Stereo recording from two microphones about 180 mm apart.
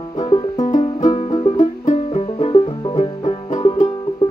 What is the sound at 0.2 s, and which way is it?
Music, 25° left (ahead or behind).